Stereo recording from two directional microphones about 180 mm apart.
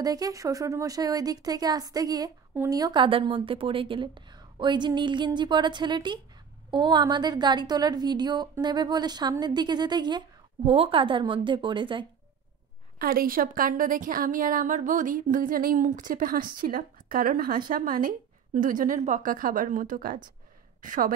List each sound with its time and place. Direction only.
0.0 s a woman's voice: 20° right (ahead or behind)
13.0 s a woman's voice: 55° right (ahead or behind)